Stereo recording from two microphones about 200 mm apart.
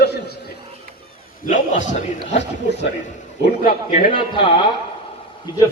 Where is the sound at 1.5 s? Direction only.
40° left (ahead or behind).